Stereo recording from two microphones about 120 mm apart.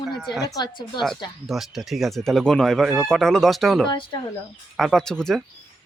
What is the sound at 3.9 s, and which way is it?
Speech, 40° left (ahead or behind).